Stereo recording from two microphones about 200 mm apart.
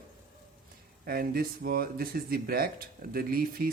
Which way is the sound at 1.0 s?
45° right (ahead or behind).